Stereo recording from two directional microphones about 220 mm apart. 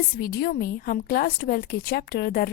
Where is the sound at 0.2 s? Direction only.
45° left (ahead or behind).